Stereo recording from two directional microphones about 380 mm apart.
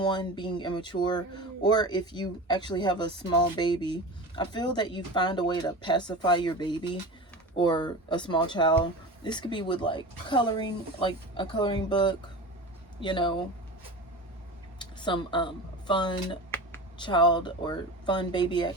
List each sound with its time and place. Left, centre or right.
0.0 s speech: centre
14.8 s speech: centre